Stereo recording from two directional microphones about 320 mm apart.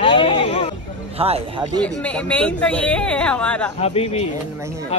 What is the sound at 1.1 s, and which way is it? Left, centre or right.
Speech, centre.